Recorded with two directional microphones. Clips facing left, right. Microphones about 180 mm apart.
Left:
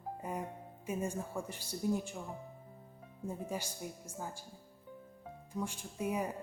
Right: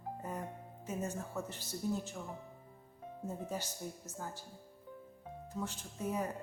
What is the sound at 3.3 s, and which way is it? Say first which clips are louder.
Speech: left 1 dB; 10° left (ahead or behind).